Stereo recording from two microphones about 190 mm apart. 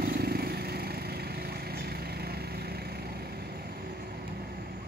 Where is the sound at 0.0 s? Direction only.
55° right (ahead or behind).